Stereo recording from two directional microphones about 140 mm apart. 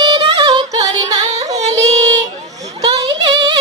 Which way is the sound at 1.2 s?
50° right (ahead or behind).